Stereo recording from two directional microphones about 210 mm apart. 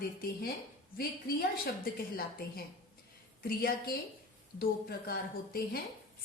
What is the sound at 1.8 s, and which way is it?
A woman's voice, 45° left (ahead or behind).